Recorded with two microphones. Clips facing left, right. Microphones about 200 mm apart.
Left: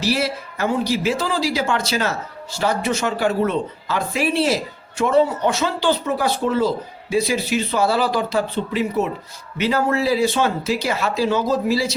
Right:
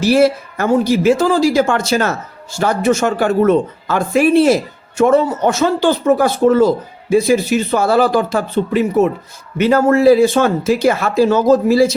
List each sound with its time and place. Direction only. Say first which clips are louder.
0.0 s a woman's voice: right 10 dB; 50° right (ahead or behind)